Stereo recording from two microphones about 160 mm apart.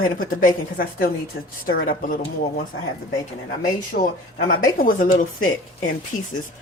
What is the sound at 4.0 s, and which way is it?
Speech, 60° left (ahead or behind).